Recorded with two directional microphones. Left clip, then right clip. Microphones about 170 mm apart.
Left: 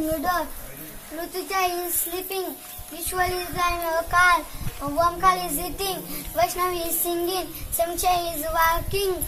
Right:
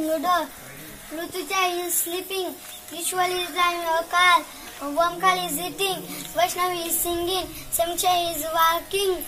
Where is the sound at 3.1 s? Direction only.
10° right (ahead or behind).